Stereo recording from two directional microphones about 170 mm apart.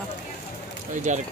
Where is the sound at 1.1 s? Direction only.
45° right (ahead or behind).